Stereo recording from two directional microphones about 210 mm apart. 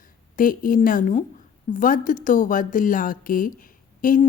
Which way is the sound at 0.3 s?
40° left (ahead or behind).